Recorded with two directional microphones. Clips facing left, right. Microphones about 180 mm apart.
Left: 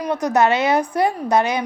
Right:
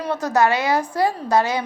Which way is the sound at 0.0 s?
15° left (ahead or behind).